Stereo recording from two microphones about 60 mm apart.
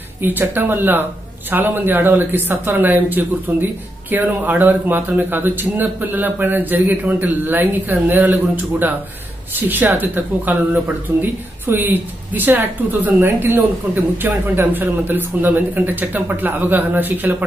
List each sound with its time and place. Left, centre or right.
0.2 s speech: right